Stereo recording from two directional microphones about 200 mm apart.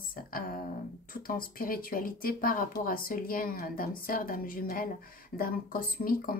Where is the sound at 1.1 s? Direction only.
45° left (ahead or behind).